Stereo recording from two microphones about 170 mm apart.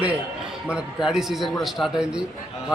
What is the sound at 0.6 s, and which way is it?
A man's voice, 5° right (ahead or behind).